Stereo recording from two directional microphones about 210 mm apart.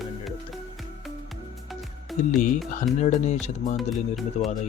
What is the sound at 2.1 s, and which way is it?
Music, centre (ahead or behind).